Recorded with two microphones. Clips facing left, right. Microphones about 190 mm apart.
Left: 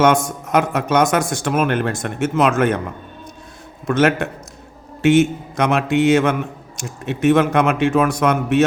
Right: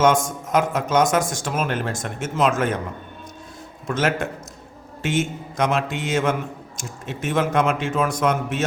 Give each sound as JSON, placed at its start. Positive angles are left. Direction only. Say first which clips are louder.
{"t": 0.0, "sound": "a man's voice", "louder": "left 3 dB", "side_deg": 65}
{"t": 3.8, "sound": "a man's voice", "louder": "left 6 dB", "side_deg": 65}